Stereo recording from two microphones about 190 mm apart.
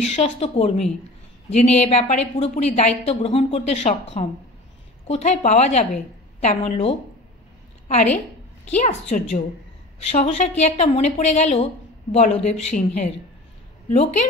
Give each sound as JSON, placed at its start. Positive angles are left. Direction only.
{"t": 0.0, "sound": "a woman's voice", "side_deg": 35}